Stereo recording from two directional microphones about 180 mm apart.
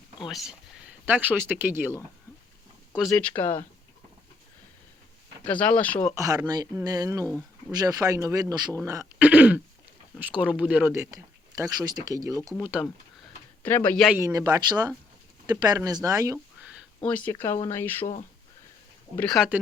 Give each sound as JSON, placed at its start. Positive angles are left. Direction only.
{"t": 0.3, "sound": "speech", "side_deg": 0}
{"t": 2.9, "sound": "speech", "side_deg": 0}
{"t": 5.5, "sound": "speech", "side_deg": 5}
{"t": 6.1, "sound": "speech", "side_deg": -20}
{"t": 9.1, "sound": "throat clearing", "side_deg": -10}
{"t": 10.2, "sound": "speech", "side_deg": -10}
{"t": 12.6, "sound": "speech", "side_deg": -5}
{"t": 13.6, "sound": "speech", "side_deg": 10}
{"t": 14.2, "sound": "speech", "side_deg": -20}
{"t": 17.0, "sound": "speech", "side_deg": 5}
{"t": 18.0, "sound": "speech", "side_deg": 45}
{"t": 19.1, "sound": "speech", "side_deg": 5}